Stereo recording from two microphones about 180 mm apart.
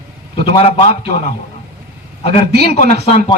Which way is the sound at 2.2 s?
35° left (ahead or behind).